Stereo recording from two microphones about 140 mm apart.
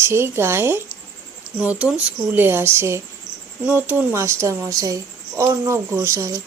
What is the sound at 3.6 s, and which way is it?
Speech, 15° right (ahead or behind).